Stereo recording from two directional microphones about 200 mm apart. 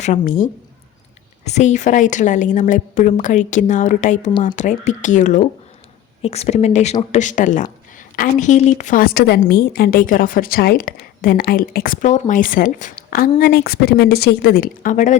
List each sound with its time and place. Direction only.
0.0 s a woman's voice: 40° left (ahead or behind)
1.5 s a woman's voice: 35° left (ahead or behind)